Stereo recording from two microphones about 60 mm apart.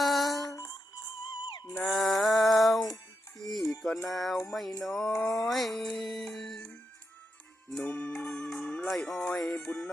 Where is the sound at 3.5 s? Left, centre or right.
Centre.